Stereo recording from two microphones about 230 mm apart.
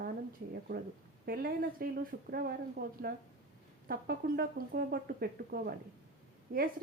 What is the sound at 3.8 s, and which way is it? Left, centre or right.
Speech, right.